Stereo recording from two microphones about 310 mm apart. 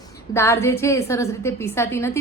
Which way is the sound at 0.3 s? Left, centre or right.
Centre.